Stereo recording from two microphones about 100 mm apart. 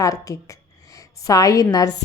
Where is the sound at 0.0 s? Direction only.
35° left (ahead or behind).